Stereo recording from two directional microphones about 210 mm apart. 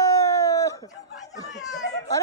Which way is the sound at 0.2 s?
15° left (ahead or behind).